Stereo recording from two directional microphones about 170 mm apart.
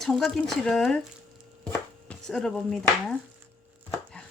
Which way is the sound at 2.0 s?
5° left (ahead or behind).